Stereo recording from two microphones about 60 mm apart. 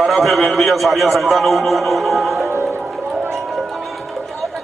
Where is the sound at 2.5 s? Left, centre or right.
Right.